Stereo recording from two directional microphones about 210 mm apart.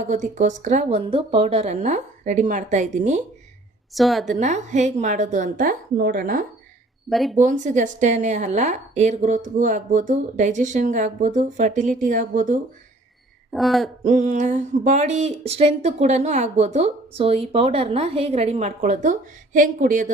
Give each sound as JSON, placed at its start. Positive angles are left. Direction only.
{"t": 0.0, "sound": "a woman's voice", "side_deg": -35}
{"t": 3.9, "sound": "speech", "side_deg": 0}
{"t": 4.3, "sound": "a woman's voice", "side_deg": -35}
{"t": 7.1, "sound": "speech", "side_deg": 0}
{"t": 7.3, "sound": "a woman's voice", "side_deg": -35}
{"t": 13.5, "sound": "speech", "side_deg": 0}
{"t": 14.0, "sound": "a woman's voice", "side_deg": -35}